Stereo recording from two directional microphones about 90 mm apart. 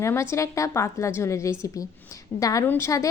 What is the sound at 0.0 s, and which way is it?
A woman's voice, 30° left (ahead or behind).